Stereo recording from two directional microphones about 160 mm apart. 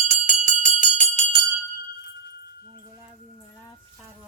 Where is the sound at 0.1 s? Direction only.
50° right (ahead or behind).